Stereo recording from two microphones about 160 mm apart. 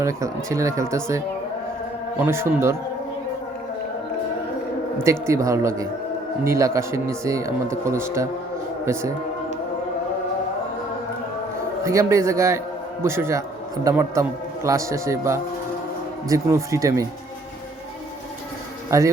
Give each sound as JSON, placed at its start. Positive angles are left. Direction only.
{"t": 0.0, "sound": "a man's voice", "side_deg": -20}
{"t": 2.2, "sound": "a man's voice", "side_deg": -15}
{"t": 5.0, "sound": "a man's voice", "side_deg": -20}
{"t": 11.8, "sound": "a man's voice", "side_deg": -20}
{"t": 18.9, "sound": "speech", "side_deg": -20}